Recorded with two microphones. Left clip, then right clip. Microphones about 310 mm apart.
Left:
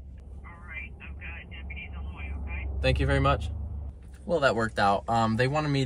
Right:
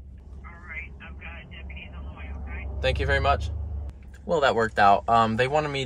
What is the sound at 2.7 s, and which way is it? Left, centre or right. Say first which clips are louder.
Speech: right 2 dB; centre.